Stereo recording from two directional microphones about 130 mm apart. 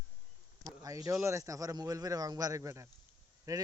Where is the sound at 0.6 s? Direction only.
25° right (ahead or behind).